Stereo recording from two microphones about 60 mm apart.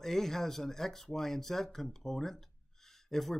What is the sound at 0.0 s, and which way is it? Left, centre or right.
Speech, centre.